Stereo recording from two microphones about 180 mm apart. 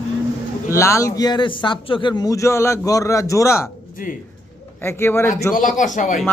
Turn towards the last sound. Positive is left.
turn(degrees=45)  # may be behind; listen again after turning